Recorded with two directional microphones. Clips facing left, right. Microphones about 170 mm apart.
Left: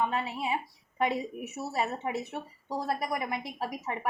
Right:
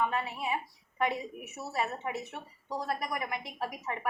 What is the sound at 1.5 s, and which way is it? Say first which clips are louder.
A woman's voice: left 2 dB; 30° left (ahead or behind).